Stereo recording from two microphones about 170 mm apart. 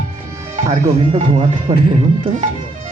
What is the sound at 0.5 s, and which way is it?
Speech, 40° right (ahead or behind).